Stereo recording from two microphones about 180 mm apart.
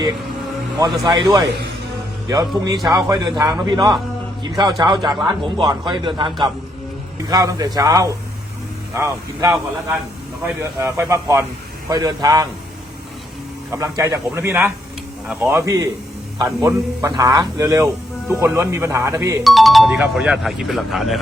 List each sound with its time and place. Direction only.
0.8 s a man's voice: 20° right (ahead or behind)
13.7 s a man's voice: 15° right (ahead or behind)
19.5 s speech: centre (ahead or behind)